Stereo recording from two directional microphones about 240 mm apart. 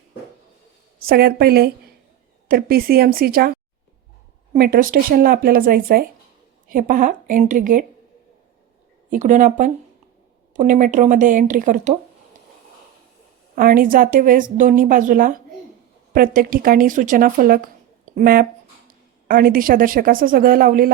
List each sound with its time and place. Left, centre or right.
1.0 s a woman's voice: right
9.0 s a woman's voice: right
13.6 s a woman's voice: right